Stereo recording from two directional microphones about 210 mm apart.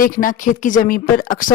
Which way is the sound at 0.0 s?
40° left (ahead or behind).